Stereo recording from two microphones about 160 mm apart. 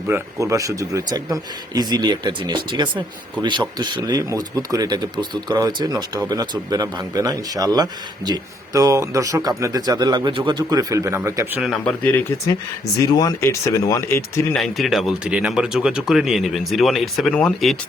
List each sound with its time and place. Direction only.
0.1 s speech: 20° right (ahead or behind)
11.9 s speech: 15° left (ahead or behind)
14.5 s speech: centre (ahead or behind)